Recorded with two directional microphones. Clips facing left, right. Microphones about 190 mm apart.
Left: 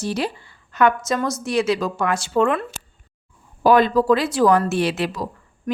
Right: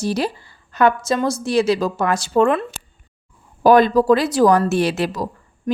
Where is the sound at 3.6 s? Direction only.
40° right (ahead or behind).